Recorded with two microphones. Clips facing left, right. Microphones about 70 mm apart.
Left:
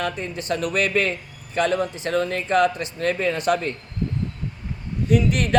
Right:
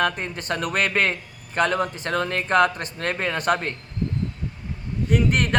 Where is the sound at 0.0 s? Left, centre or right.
Right.